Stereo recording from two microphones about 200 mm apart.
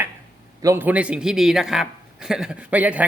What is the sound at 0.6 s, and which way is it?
Speech, 10° right (ahead or behind).